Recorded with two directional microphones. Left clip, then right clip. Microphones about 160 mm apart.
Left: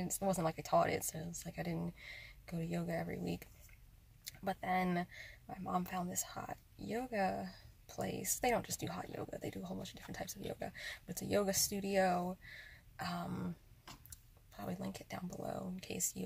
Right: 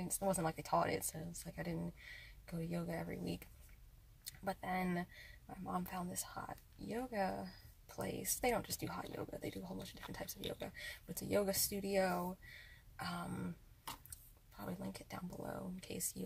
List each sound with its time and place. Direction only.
0.0 s speech: 10° left (ahead or behind)
4.5 s speech: 15° left (ahead or behind)
14.6 s speech: 15° left (ahead or behind)